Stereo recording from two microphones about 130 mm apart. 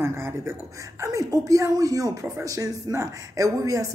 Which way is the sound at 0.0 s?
20° right (ahead or behind).